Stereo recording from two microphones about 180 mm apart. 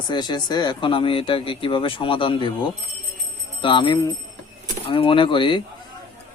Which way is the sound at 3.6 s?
25° left (ahead or behind).